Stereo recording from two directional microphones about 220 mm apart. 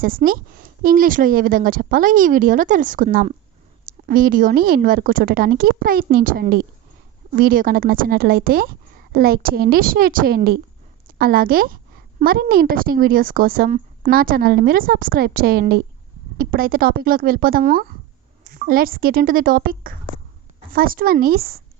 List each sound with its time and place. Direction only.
0.0 s a woman's voice: 40° right (ahead or behind)